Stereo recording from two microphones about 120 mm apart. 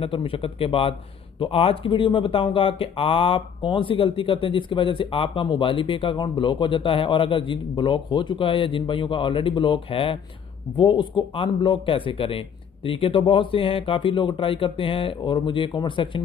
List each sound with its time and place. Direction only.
0.0 s speech: 50° left (ahead or behind)